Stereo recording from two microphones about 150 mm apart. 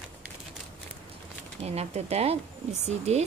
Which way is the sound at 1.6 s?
45° right (ahead or behind).